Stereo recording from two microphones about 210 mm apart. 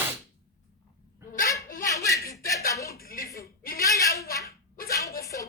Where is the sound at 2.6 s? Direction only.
15° left (ahead or behind).